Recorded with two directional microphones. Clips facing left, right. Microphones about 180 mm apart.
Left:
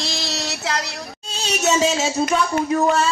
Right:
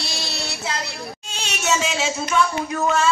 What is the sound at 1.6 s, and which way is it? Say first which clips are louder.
Music: left 3 dB; 40° left (ahead or behind).